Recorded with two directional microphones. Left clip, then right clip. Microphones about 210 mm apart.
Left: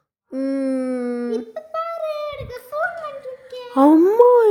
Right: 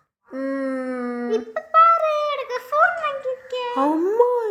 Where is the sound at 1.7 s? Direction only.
25° left (ahead or behind).